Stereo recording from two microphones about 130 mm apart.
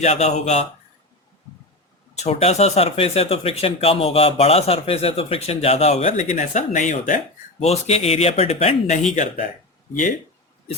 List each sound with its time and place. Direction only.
0.0 s speech: 60° left (ahead or behind)
2.1 s speech: 55° left (ahead or behind); by 7.2 s 75° left (ahead or behind)
7.6 s speech: 55° left (ahead or behind)